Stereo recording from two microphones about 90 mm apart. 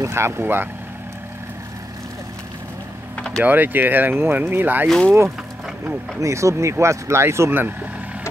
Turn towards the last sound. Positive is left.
turn(degrees=-25)  # may be behind; listen again after turning